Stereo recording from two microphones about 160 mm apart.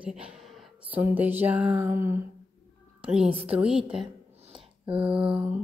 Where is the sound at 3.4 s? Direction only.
5° right (ahead or behind).